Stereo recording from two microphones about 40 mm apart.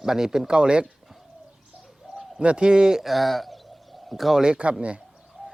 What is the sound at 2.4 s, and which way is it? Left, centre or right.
Speech, right.